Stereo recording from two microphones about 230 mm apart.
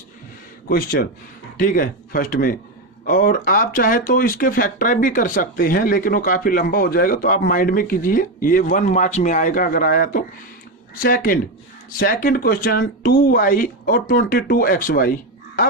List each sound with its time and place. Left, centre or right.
0.7 s speech: left